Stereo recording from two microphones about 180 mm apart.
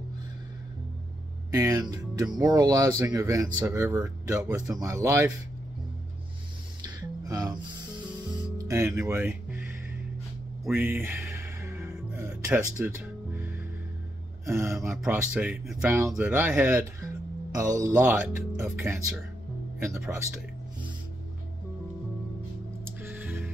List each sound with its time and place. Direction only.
1.5 s speech: 15° right (ahead or behind)
7.2 s speech: 20° right (ahead or behind)
8.3 s music: 20° right (ahead or behind)
10.7 s music: 10° right (ahead or behind)
14.4 s speech: 15° right (ahead or behind)
15.9 s speech: 15° right (ahead or behind)
17.8 s speech: 15° right (ahead or behind)
22.8 s music: 10° right (ahead or behind)